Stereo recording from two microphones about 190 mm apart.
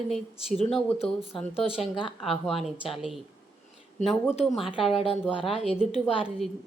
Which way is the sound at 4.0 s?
40° left (ahead or behind).